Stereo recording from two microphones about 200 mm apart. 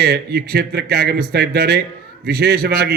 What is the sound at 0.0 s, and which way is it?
A man's voice, 50° right (ahead or behind).